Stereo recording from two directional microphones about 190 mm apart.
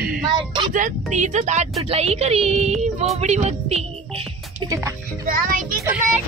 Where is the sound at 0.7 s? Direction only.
40° right (ahead or behind).